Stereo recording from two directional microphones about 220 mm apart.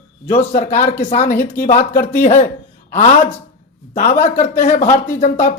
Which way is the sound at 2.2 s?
35° left (ahead or behind).